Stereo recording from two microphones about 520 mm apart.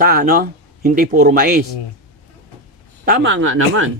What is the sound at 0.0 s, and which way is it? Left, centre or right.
Speech, centre.